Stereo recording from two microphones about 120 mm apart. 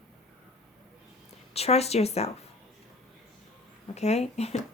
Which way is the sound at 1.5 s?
60° left (ahead or behind).